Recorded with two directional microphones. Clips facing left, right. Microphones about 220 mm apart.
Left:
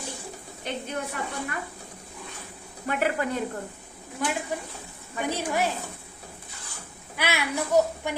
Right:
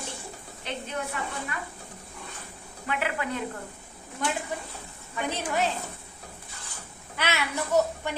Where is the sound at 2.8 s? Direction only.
45° left (ahead or behind).